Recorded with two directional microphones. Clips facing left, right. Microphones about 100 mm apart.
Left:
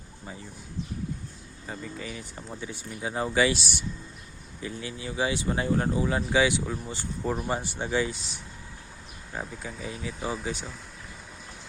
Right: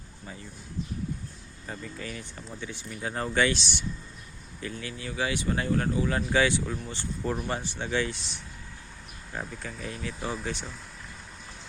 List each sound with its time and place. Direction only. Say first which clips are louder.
1.6 s speech: left 1 dB; 10° left (ahead or behind)
2.3 s speech: left 1 dB; 25° left (ahead or behind)
4.6 s speech: left 1 dB; 20° left (ahead or behind)
6.1 s speech: left 1 dB; 15° left (ahead or behind)
8.1 s speech: left 1 dB; centre (ahead or behind)